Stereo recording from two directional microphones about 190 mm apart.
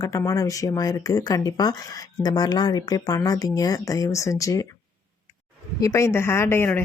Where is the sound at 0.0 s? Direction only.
15° left (ahead or behind).